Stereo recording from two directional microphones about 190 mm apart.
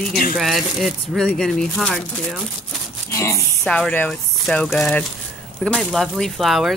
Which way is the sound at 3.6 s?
5° left (ahead or behind).